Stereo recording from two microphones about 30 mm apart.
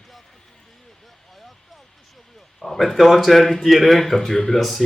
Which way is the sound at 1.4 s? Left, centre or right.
Centre.